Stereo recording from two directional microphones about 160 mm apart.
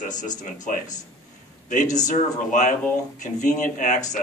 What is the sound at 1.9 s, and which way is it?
Speech, 50° left (ahead or behind).